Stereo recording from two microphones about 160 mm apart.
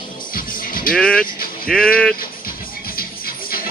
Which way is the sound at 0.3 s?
60° left (ahead or behind).